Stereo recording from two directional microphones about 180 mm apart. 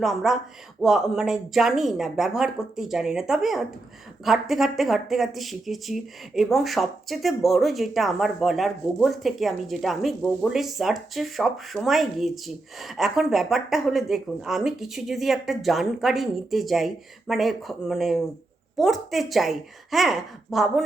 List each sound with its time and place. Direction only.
0.0 s speech: centre (ahead or behind)